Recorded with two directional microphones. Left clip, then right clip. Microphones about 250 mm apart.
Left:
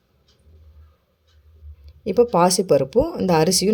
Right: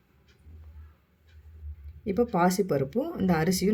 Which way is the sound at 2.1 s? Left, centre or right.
Left.